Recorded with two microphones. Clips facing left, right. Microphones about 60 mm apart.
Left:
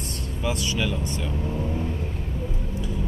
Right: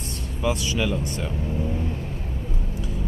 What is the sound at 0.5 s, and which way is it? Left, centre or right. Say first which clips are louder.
Speech: right 2 dB; centre.